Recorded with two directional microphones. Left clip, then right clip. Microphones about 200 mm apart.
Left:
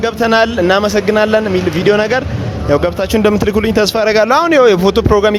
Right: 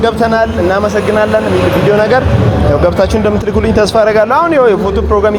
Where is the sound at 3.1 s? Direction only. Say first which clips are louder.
Even; 40° left (ahead or behind).